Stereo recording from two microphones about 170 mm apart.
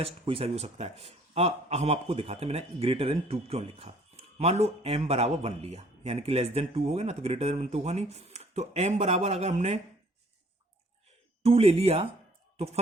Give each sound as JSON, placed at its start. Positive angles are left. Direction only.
{"t": 0.0, "sound": "a man's voice", "side_deg": -35}
{"t": 11.4, "sound": "a man's voice", "side_deg": -35}